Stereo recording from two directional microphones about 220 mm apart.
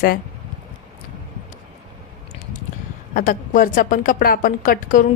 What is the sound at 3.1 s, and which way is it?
A woman's voice, 40° left (ahead or behind).